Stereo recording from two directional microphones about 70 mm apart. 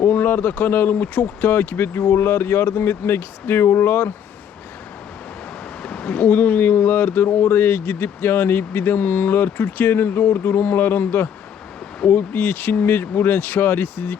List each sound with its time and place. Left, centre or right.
0.0 s speech: left
5.8 s speech: centre